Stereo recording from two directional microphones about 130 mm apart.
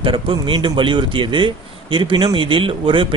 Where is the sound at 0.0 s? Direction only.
40° right (ahead or behind).